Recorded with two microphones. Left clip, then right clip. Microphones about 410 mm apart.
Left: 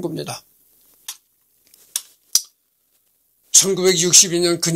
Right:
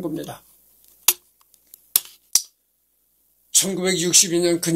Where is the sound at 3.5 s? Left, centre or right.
Left.